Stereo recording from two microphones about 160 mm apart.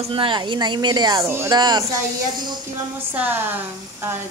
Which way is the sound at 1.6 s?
25° right (ahead or behind).